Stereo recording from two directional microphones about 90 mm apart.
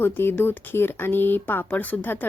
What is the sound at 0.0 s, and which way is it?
Speech, 25° left (ahead or behind).